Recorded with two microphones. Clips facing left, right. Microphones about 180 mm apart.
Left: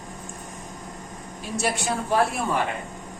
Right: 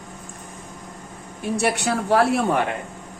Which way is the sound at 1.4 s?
60° right (ahead or behind).